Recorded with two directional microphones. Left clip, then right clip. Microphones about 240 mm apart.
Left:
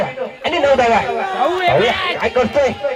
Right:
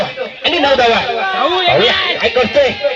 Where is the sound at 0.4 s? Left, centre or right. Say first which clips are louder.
Right 2 dB; right.